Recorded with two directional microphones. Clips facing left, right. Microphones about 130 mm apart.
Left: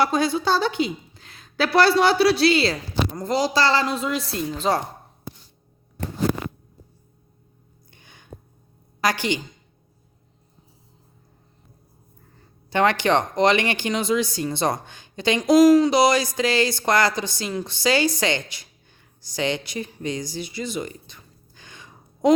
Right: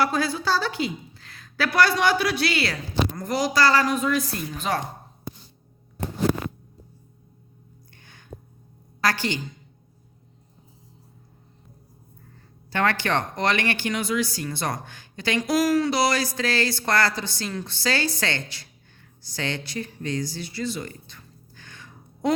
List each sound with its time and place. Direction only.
0.0 s a woman's voice: 20° left (ahead or behind)
7.9 s a sound: 15° left (ahead or behind)
9.0 s a woman's voice: 15° left (ahead or behind)
12.7 s speech: 20° left (ahead or behind)